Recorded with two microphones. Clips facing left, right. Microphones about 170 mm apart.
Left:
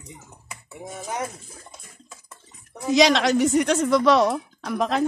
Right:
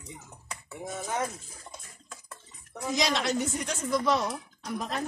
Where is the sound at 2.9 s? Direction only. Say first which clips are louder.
Left 10 dB; 85° left.